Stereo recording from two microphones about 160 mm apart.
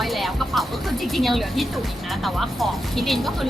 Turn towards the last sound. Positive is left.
turn(degrees=0)  # may be behind; listen again after turning